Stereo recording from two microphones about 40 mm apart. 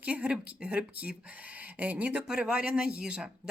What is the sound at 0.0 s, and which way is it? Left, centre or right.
A woman's voice, right.